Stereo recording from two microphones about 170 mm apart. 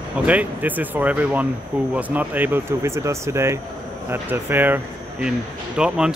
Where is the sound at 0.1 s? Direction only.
10° right (ahead or behind).